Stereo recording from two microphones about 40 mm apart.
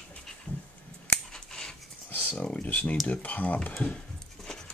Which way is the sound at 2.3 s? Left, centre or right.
Left.